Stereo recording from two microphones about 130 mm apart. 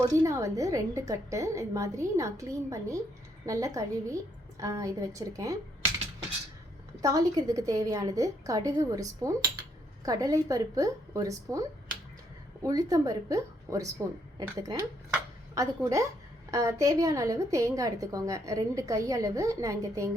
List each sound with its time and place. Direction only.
0.0 s a woman's voice: 25° right (ahead or behind)
7.0 s a woman's voice: 25° right (ahead or behind)
12.6 s a woman's voice: 25° right (ahead or behind)